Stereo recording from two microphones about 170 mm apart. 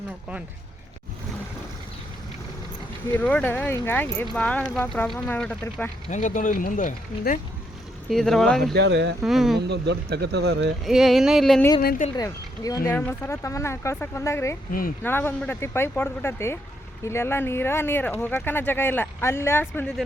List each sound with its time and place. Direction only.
3.2 s speech: 10° left (ahead or behind)
6.1 s speech: 50° left (ahead or behind)
8.1 s speech: centre (ahead or behind)
8.7 s speech: 85° right
9.2 s speech: centre (ahead or behind)
9.6 s speech: 80° right
10.8 s speech: centre (ahead or behind)
11.8 s speech: 60° left (ahead or behind)
12.1 s speech: 20° left (ahead or behind)
14.7 s speech: 60° left (ahead or behind)
15.0 s speech: 10° left (ahead or behind)